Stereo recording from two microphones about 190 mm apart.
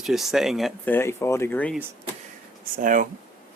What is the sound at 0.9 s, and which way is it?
Speech, 15° left (ahead or behind).